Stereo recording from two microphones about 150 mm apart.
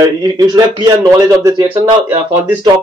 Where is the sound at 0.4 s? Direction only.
25° right (ahead or behind).